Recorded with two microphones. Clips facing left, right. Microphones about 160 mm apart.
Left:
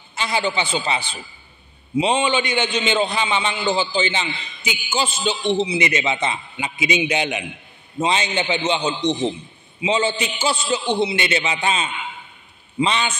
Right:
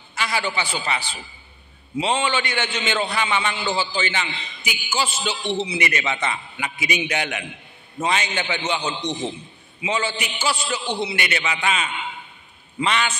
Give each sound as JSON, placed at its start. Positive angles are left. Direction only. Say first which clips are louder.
{"t": 0.1, "sound": "a man's voice", "louder": "left 3 dB", "side_deg": 25}